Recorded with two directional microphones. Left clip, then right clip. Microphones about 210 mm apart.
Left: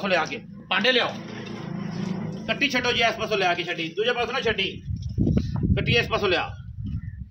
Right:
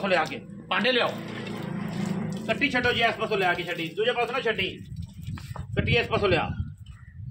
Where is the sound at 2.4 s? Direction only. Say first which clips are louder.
Left 1 dB; 50° left (ahead or behind).